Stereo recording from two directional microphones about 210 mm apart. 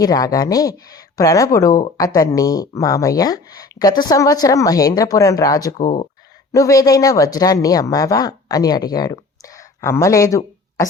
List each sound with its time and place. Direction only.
0.0 s speech: 15° left (ahead or behind)